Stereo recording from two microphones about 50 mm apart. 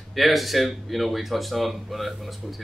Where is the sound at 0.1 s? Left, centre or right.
Centre.